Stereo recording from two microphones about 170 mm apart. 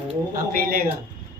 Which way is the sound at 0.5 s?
60° right (ahead or behind).